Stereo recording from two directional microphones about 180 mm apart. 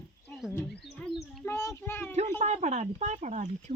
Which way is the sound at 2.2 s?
40° right (ahead or behind).